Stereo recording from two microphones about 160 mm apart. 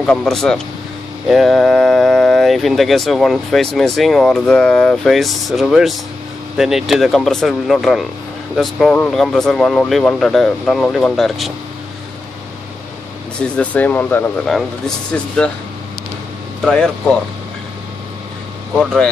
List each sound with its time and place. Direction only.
0.0 s speech: 5° left (ahead or behind)
13.4 s speech: 10° left (ahead or behind)
16.6 s speech: 5° left (ahead or behind)